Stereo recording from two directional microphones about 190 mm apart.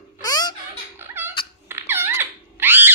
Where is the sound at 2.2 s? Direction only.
10° right (ahead or behind).